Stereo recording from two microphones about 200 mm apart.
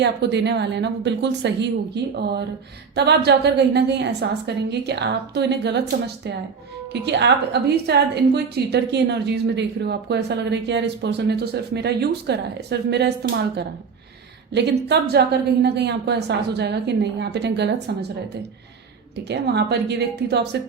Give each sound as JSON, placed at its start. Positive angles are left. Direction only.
{"t": 0.0, "sound": "a woman's voice", "side_deg": -60}
{"t": 6.9, "sound": "a woman's voice", "side_deg": -55}
{"t": 19.1, "sound": "a woman's voice", "side_deg": -55}